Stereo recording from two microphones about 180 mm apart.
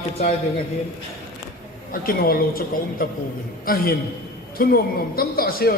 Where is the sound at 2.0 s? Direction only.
55° left (ahead or behind).